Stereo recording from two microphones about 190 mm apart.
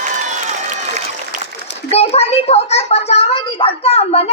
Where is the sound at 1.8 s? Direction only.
35° left (ahead or behind).